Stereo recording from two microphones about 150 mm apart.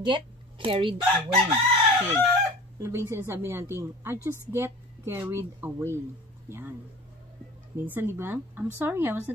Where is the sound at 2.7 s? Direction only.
20° right (ahead or behind).